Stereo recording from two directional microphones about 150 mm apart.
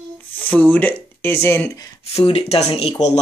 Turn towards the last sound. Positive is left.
turn(degrees=40)  # may be behind; listen again after turning